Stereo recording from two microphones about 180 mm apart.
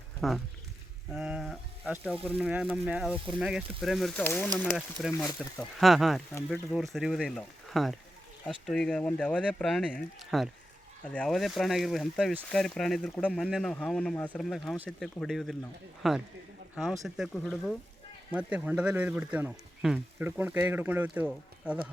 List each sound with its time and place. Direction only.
0.2 s speech: centre (ahead or behind)
5.1 s speech: 20° left (ahead or behind)
5.5 s speech: centre (ahead or behind)